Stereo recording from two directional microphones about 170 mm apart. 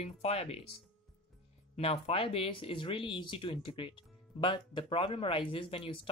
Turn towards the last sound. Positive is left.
turn(degrees=30)  # may be behind; listen again after turning